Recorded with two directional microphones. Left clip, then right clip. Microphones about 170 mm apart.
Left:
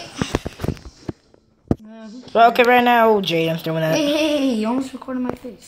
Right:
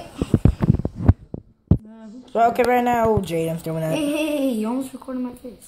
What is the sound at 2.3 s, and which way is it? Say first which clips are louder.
Speech: left 5 dB; 5° right (ahead or behind).